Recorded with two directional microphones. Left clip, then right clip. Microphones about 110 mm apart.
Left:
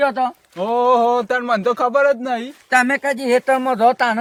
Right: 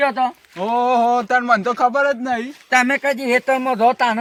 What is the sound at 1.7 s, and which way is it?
Speech, 75° left (ahead or behind).